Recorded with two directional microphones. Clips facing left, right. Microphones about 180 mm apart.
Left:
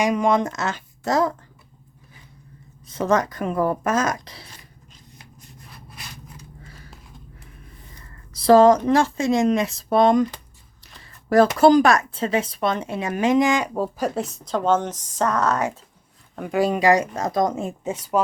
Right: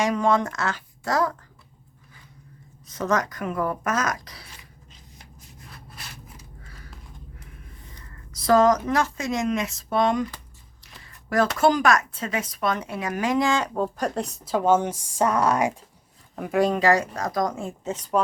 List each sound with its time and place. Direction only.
0.0 s speech: 15° left (ahead or behind)
2.8 s speech: 30° left (ahead or behind)
8.3 s a sound: 30° left (ahead or behind)
8.9 s speech: 30° left (ahead or behind)
11.5 s speech: 35° left (ahead or behind); by 15.8 s 10° right (ahead or behind)
16.3 s speech: centre (ahead or behind)